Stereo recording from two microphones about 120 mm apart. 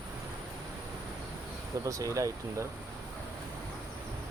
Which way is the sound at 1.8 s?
25° right (ahead or behind).